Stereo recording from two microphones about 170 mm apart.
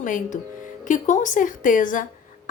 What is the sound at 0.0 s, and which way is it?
A woman's voice, 50° left (ahead or behind).